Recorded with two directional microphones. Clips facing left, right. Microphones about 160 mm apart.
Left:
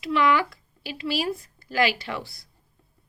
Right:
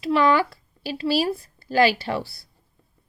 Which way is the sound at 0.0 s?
35° right (ahead or behind).